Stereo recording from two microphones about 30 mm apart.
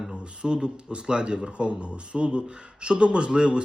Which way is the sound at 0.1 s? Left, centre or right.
Right.